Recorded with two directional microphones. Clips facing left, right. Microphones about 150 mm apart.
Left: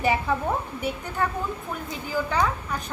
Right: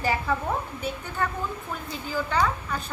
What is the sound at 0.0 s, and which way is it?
A woman's voice, 20° left (ahead or behind).